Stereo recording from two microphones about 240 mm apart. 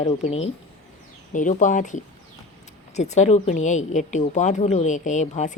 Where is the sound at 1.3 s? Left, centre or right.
Left.